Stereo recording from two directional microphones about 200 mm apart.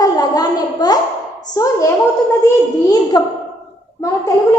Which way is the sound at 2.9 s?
20° left (ahead or behind).